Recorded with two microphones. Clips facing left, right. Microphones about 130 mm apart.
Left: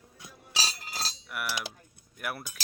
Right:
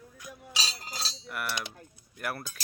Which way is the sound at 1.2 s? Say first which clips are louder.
Right 1 dB; 5° left (ahead or behind).